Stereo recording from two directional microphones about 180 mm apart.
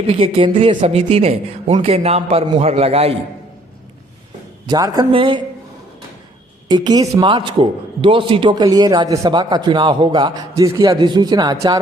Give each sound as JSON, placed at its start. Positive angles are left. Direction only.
{"t": 0.1, "sound": "a man's voice", "side_deg": -30}
{"t": 4.7, "sound": "a man's voice", "side_deg": -20}
{"t": 6.7, "sound": "a man's voice", "side_deg": -25}